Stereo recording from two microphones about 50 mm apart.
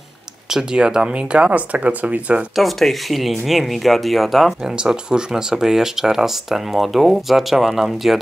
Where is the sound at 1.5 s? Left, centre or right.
Right.